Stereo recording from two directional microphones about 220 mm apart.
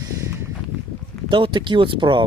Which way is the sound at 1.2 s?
20° right (ahead or behind).